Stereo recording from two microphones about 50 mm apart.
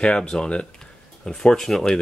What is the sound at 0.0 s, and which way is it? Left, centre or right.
Speech, left.